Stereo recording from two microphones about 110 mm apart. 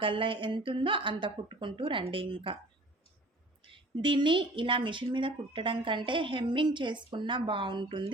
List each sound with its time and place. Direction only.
0.0 s a woman's voice: 50° right (ahead or behind)
3.6 s a woman's voice: 50° right (ahead or behind)